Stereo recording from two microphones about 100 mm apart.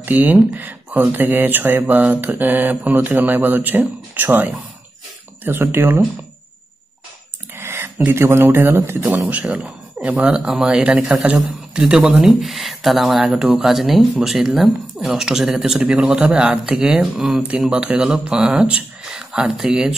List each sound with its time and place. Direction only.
0.0 s speech: 15° right (ahead or behind)
7.5 s speech: 25° right (ahead or behind)
9.0 s speech: 15° right (ahead or behind)